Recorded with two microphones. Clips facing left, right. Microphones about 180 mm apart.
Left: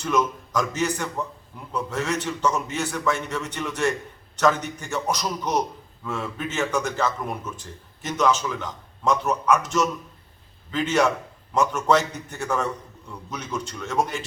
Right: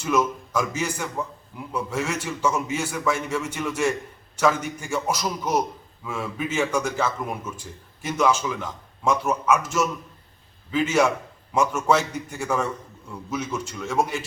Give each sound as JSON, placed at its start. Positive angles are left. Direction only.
{"t": 0.0, "sound": "a man's voice", "side_deg": -5}